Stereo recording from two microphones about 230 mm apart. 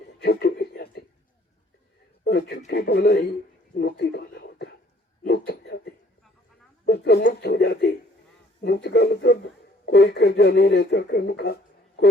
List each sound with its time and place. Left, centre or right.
0.2 s speech: left
2.2 s speech: left
5.5 s a sound: left
6.8 s speech: left